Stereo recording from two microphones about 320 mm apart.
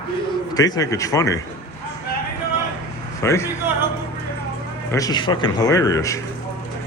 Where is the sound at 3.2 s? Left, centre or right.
Centre.